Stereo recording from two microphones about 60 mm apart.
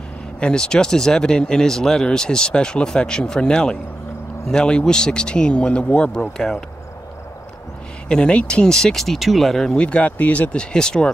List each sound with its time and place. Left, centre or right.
0.4 s speech: centre
6.3 s speech: centre
8.1 s speech: centre
9.8 s speech: left